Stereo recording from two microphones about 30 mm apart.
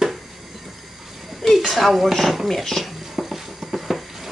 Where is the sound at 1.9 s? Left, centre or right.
Centre.